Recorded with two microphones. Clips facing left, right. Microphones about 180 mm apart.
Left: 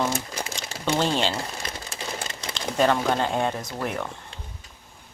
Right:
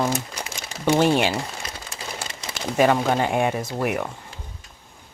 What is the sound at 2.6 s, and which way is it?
Speech, 10° right (ahead or behind).